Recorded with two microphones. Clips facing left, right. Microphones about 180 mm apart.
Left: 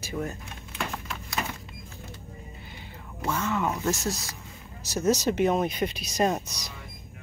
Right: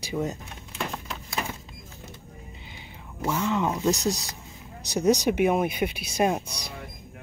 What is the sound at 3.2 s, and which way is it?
Speech, 15° right (ahead or behind).